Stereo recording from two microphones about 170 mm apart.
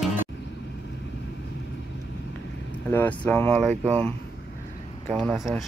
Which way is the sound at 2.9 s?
10° left (ahead or behind).